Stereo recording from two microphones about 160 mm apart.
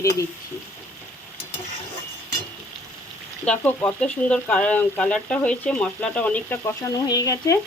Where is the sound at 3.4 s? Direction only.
10° left (ahead or behind).